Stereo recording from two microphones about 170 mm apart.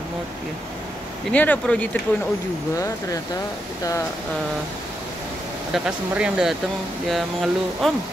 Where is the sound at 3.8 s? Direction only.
20° left (ahead or behind).